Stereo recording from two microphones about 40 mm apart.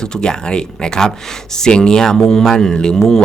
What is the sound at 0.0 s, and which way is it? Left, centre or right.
Speech, centre.